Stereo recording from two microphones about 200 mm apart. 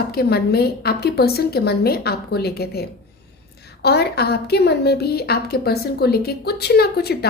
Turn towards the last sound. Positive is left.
turn(degrees=55)  # may be behind; listen again after turning